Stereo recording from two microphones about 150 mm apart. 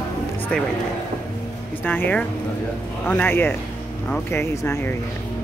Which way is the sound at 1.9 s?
10° left (ahead or behind).